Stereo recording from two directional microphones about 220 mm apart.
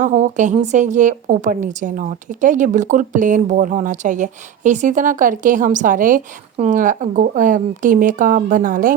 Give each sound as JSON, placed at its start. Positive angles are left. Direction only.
{"t": 0.0, "sound": "a woman's voice", "side_deg": -35}